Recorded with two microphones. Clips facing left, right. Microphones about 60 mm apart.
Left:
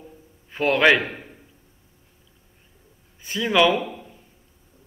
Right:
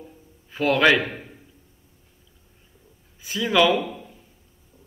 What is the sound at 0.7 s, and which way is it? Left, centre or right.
Speech, centre.